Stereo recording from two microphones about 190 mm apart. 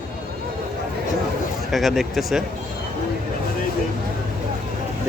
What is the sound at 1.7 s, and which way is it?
Speech, centre (ahead or behind).